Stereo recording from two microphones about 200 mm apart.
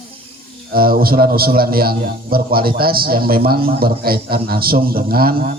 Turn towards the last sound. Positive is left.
turn(degrees=-50)  # may be behind; listen again after turning